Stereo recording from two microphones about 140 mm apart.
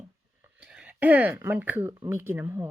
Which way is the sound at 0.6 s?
10° right (ahead or behind).